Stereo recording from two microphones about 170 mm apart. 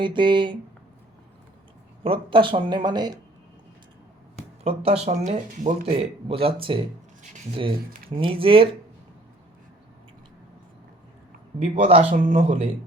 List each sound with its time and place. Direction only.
0.0 s speech: 30° right (ahead or behind)
2.0 s speech: 30° right (ahead or behind)
4.4 s speech: 35° right (ahead or behind)
8.1 s speech: 30° right (ahead or behind)
11.6 s speech: 35° right (ahead or behind)